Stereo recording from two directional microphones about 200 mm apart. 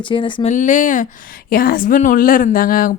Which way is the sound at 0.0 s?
25° left (ahead or behind).